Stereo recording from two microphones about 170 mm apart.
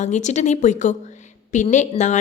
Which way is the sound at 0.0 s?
45° left (ahead or behind).